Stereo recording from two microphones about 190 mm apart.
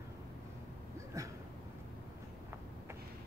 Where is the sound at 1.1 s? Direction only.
15° right (ahead or behind).